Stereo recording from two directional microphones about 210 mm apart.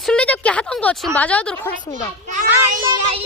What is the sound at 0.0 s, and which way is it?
A woman's voice, 5° left (ahead or behind).